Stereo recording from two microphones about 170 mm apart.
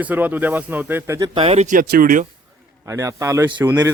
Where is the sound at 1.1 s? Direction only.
25° right (ahead or behind).